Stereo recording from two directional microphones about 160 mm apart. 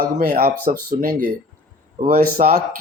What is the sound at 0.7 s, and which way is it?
Speech, 50° right (ahead or behind).